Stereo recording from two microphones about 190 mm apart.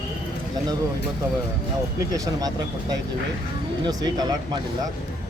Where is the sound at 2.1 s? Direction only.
20° right (ahead or behind).